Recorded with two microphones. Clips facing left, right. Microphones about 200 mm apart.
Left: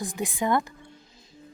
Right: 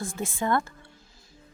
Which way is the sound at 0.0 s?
15° left (ahead or behind).